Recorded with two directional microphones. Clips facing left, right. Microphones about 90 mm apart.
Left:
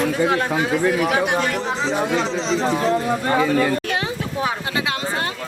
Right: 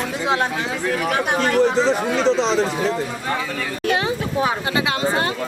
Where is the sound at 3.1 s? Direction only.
50° left (ahead or behind).